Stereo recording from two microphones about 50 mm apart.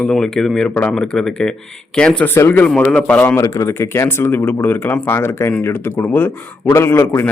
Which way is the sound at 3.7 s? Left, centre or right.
Left.